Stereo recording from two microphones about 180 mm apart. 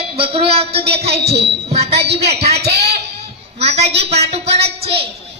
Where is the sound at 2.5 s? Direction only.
65° right (ahead or behind).